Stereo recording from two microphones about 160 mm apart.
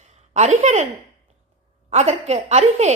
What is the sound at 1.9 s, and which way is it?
A woman's voice, 40° right (ahead or behind).